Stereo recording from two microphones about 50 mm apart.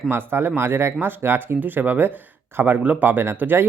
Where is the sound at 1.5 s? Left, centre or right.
Right.